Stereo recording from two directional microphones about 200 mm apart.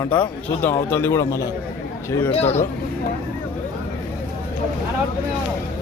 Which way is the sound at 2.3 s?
30° left (ahead or behind).